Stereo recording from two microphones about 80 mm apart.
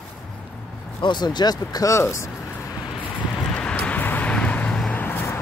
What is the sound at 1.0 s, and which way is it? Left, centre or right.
Speech, left.